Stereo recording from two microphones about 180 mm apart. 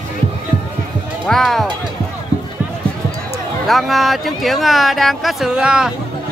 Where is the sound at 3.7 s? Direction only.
Centre (ahead or behind).